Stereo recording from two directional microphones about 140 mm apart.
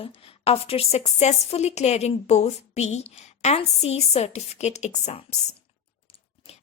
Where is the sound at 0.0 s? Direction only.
45° left (ahead or behind).